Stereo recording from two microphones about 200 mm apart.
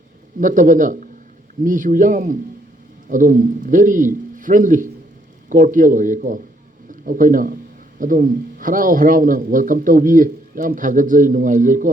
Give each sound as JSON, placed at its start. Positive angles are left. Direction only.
{"t": 0.3, "sound": "a man's voice", "side_deg": -40}